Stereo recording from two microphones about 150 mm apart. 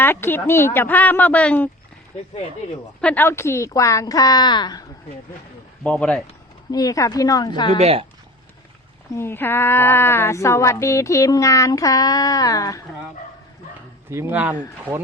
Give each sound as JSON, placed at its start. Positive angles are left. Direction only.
{"t": 0.0, "sound": "speech", "side_deg": 15}
{"t": 3.0, "sound": "speech", "side_deg": 10}
{"t": 5.8, "sound": "speech", "side_deg": 10}
{"t": 6.7, "sound": "speech", "side_deg": 25}
{"t": 7.8, "sound": "speech", "side_deg": -40}
{"t": 9.1, "sound": "speech", "side_deg": 15}
{"t": 14.1, "sound": "speech", "side_deg": -15}